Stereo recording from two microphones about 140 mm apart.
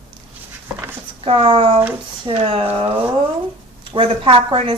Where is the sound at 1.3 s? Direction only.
40° right (ahead or behind).